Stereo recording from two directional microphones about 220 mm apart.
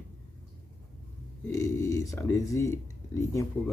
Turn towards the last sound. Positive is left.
turn(degrees=10)  # may be behind; listen again after turning